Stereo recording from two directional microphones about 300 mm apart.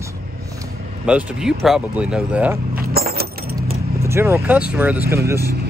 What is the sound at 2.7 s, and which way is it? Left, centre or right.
Keys jangling, right.